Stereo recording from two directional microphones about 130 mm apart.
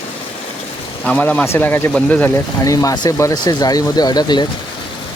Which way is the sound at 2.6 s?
25° left (ahead or behind).